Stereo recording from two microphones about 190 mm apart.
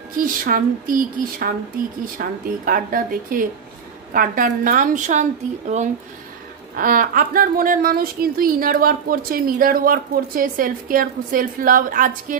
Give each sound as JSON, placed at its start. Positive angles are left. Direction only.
{"t": 0.2, "sound": "speech", "side_deg": -45}
{"t": 6.8, "sound": "speech", "side_deg": -45}